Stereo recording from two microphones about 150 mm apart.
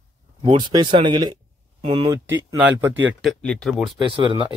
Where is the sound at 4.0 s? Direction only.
35° right (ahead or behind).